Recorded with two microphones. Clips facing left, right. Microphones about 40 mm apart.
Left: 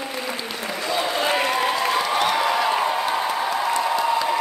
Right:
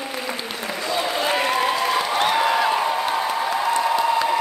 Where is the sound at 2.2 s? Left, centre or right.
Right.